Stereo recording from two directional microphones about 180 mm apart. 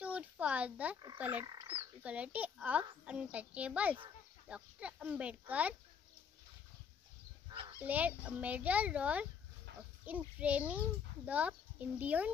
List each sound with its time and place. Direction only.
0.0 s a sound: 10° right (ahead or behind)
1.1 s a child's voice: 10° right (ahead or behind)
1.4 s speech: 25° right (ahead or behind)
2.0 s a child's voice: 5° right (ahead or behind)
7.5 s a sound: 25° right (ahead or behind)
7.8 s a child's voice: 10° right (ahead or behind)